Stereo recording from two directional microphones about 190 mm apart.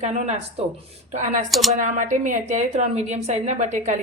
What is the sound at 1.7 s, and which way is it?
Speech, 40° right (ahead or behind).